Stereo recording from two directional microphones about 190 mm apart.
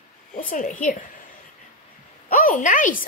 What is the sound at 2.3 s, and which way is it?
Speech, 45° left (ahead or behind).